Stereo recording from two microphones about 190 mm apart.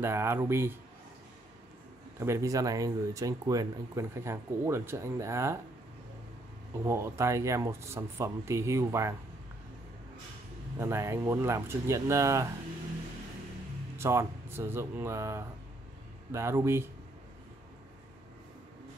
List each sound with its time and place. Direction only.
0.0 s speech: 15° right (ahead or behind)
2.1 s speech: 15° right (ahead or behind)
6.8 s speech: 15° right (ahead or behind)
10.8 s speech: 15° right (ahead or behind)
13.9 s speech: 15° right (ahead or behind)